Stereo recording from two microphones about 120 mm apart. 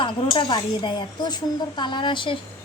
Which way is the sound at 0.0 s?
40° left (ahead or behind).